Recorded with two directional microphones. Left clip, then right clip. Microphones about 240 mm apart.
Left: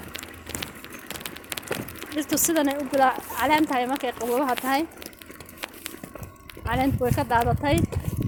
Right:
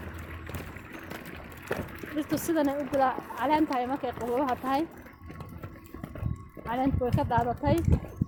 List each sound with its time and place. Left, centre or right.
1.7 s speech: left
6.7 s speech: left